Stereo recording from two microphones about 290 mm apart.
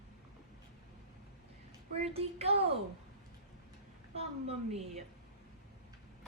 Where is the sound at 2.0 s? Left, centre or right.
Right.